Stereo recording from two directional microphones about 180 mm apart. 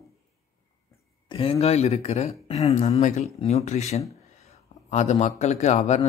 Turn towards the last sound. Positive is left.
turn(degrees=40)  # may be behind; listen again after turning